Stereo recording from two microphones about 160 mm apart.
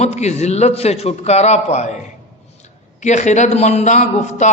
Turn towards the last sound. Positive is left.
turn(degrees=45)  # may be behind; listen again after turning